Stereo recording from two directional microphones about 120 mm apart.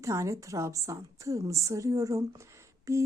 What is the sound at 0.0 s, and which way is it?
Speech, 25° right (ahead or behind).